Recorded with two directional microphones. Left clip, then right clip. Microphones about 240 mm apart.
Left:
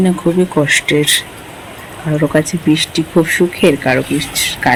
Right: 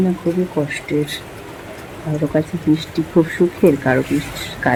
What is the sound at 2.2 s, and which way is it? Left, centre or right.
Speech, centre.